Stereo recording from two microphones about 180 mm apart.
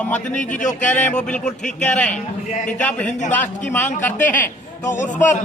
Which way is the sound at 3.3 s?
10° left (ahead or behind).